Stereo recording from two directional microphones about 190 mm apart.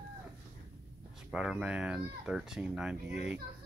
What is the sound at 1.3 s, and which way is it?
Speech, 5° right (ahead or behind).